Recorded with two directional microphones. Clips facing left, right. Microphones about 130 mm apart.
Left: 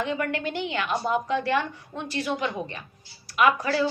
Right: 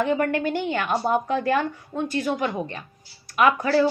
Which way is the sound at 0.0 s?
45° right (ahead or behind).